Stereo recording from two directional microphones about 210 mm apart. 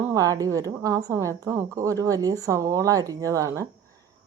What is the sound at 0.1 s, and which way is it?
A woman's voice, 15° right (ahead or behind).